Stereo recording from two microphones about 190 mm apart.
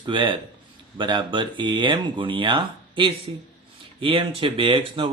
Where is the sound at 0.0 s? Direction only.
25° right (ahead or behind).